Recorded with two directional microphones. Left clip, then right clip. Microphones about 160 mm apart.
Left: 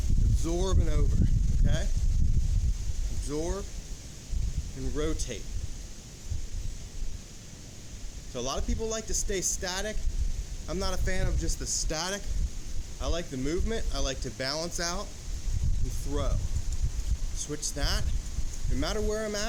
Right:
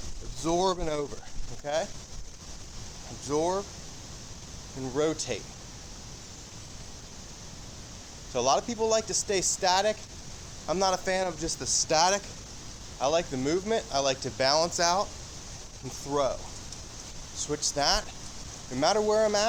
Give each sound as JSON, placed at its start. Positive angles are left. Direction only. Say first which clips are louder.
{"t": 0.4, "sound": "speech", "louder": "right 7 dB", "side_deg": 30}
{"t": 3.2, "sound": "speech", "louder": "right 6 dB", "side_deg": 30}
{"t": 4.9, "sound": "speech", "louder": "right 6 dB", "side_deg": 30}
{"t": 8.3, "sound": "speech", "louder": "right 9 dB", "side_deg": 25}
{"t": 16.1, "sound": "speech", "louder": "right 8 dB", "side_deg": 30}
{"t": 17.3, "sound": "speech", "louder": "right 6 dB", "side_deg": 30}